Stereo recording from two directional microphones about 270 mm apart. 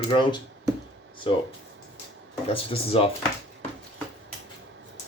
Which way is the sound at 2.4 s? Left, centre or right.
Left.